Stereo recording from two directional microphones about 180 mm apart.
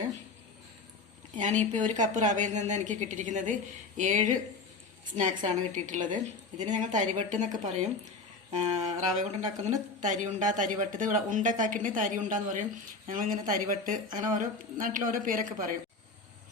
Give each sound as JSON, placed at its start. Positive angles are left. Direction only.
{"t": 1.4, "sound": "a woman's voice", "side_deg": -40}
{"t": 8.5, "sound": "a woman's voice", "side_deg": -40}